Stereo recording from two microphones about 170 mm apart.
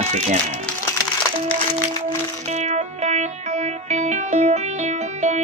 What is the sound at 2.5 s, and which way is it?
Music, 45° right (ahead or behind).